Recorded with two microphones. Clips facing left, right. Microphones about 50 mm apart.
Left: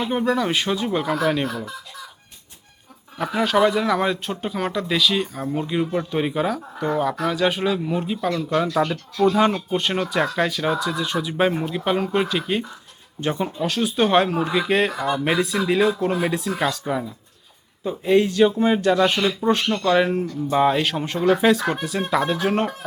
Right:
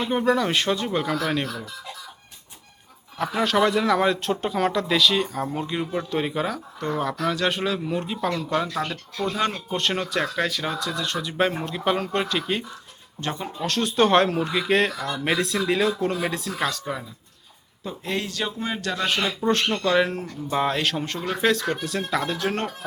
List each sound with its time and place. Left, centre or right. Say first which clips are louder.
0.0 s speech: even; centre
3.2 s speech: left 2 dB; centre
15.2 s speech: right 1 dB; centre